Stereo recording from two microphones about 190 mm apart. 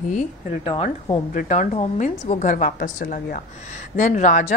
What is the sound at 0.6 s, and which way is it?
Speech, 30° left (ahead or behind).